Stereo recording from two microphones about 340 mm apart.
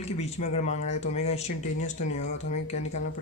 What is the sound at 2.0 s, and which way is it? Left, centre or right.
Speech, left.